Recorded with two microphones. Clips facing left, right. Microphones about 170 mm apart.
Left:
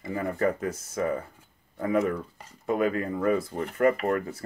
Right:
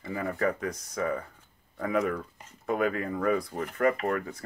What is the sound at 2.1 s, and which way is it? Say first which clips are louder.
Speech: left 2 dB; 30° left (ahead or behind).